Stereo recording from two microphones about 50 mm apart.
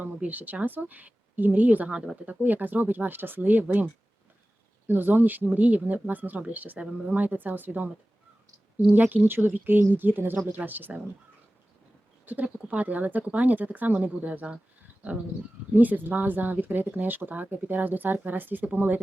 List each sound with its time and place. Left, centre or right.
0.0 s speech: right
4.9 s speech: right
5.5 s speech: right
8.9 s speech: right
12.2 s speech: right
15.7 s speech: right